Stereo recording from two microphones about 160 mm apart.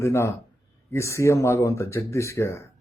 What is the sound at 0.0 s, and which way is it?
Speech, 15° left (ahead or behind).